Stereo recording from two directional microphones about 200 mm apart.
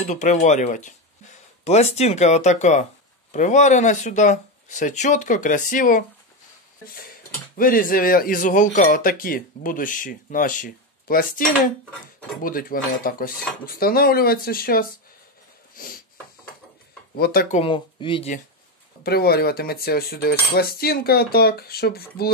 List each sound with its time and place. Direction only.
0.0 s speech: 35° left (ahead or behind)
7.5 s speech: 45° left (ahead or behind)
15.7 s a sound: 45° left (ahead or behind)
17.1 s speech: 50° left (ahead or behind)
17.6 s speech: 25° left (ahead or behind)
19.0 s speech: 50° left (ahead or behind)